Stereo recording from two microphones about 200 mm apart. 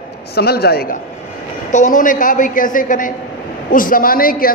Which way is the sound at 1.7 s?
40° left (ahead or behind).